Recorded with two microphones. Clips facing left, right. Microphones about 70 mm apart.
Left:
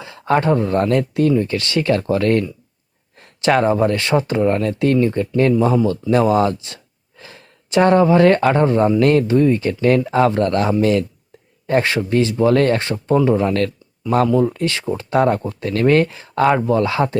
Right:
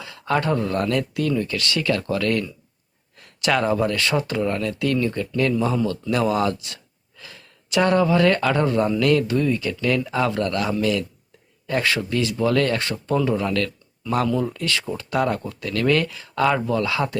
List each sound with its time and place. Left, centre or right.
0.0 s speech: left